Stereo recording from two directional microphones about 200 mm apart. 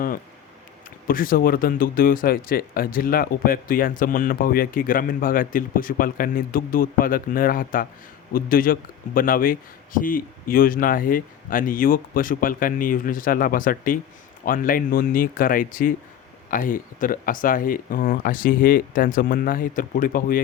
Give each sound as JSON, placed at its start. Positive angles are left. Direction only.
{"t": 1.0, "sound": "speech", "side_deg": 45}